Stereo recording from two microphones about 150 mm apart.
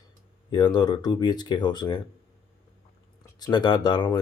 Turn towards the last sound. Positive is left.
turn(degrees=30)  # may be behind; listen again after turning